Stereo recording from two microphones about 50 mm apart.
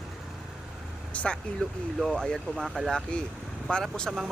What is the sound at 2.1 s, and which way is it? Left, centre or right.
Speech, centre.